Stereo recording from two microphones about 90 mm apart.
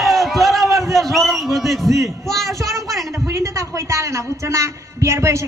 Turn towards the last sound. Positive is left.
turn(degrees=-30)  # may be behind; listen again after turning